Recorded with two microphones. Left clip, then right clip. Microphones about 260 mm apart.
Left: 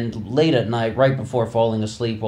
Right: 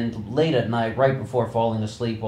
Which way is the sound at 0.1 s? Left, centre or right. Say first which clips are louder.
Left 4 dB; left.